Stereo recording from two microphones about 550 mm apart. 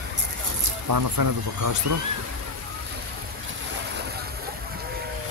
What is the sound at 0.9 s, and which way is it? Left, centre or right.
Speech, right.